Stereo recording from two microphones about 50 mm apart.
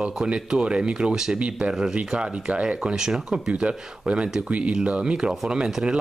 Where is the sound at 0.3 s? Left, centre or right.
Centre.